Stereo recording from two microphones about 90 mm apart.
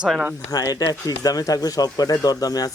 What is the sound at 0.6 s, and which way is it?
Speech, 45° left (ahead or behind).